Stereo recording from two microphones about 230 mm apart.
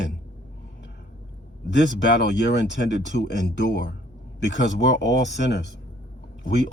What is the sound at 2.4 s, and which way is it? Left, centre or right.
Speech, left.